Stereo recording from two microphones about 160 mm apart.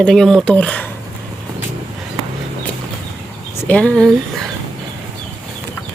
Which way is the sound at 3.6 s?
10° left (ahead or behind).